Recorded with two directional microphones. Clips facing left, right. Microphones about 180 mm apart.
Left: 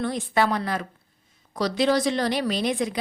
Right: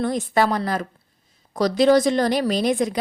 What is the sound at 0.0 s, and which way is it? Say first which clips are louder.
A woman's voice: right 3 dB; 40° right (ahead or behind).